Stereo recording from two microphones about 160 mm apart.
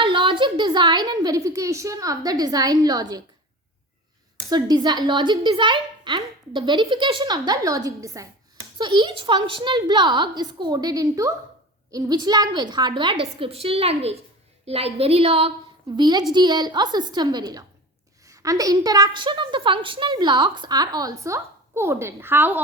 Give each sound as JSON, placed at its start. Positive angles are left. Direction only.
{"t": 0.0, "sound": "a woman's voice", "side_deg": -30}
{"t": 4.4, "sound": "a woman's voice", "side_deg": -25}
{"t": 16.0, "sound": "a woman's voice", "side_deg": -25}